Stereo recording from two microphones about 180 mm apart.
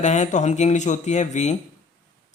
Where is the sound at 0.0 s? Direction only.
40° left (ahead or behind).